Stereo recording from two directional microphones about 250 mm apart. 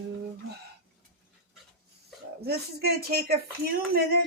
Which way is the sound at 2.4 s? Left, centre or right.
Right.